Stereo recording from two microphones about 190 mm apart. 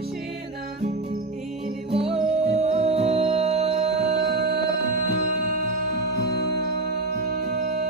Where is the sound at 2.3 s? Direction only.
35° right (ahead or behind).